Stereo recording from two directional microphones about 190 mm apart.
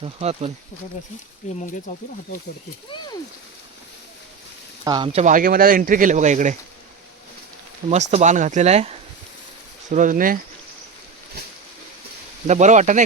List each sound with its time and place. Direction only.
0.0 s speech: 35° right (ahead or behind)
1.4 s speech: 40° left (ahead or behind)
4.9 s speech: 25° right (ahead or behind)
5.2 s speech: 45° right (ahead or behind)
8.1 s speech: 40° right (ahead or behind)
12.5 s speech: 40° right (ahead or behind)